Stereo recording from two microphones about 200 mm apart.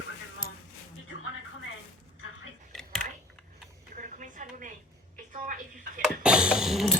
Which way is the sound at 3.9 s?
40° right (ahead or behind).